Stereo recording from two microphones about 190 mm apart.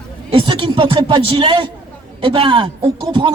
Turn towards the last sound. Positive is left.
turn(degrees=-25)  # may be behind; listen again after turning